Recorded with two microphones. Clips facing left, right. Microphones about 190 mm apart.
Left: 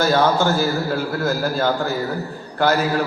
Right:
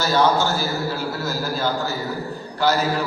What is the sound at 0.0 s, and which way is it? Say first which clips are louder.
A man's voice: left 2 dB; 55° left (ahead or behind).